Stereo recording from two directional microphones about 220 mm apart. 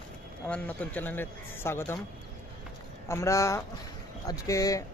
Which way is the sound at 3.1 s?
15° left (ahead or behind).